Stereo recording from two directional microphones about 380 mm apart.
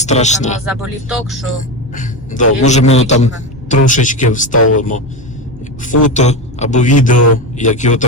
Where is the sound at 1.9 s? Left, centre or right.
Centre.